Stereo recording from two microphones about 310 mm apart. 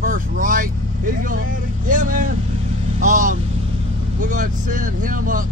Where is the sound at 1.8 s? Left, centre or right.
Right.